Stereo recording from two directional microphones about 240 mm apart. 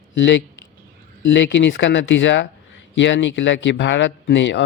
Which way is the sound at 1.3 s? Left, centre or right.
Left.